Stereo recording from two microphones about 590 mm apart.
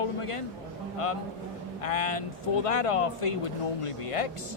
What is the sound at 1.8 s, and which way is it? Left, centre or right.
Speech, left.